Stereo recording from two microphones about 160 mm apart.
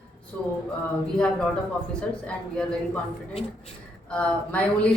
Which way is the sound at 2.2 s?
5° left (ahead or behind).